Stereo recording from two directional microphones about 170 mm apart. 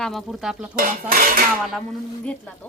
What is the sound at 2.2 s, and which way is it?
Speech, 5° left (ahead or behind).